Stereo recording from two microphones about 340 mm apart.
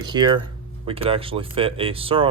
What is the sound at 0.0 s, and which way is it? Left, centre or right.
Speech, centre.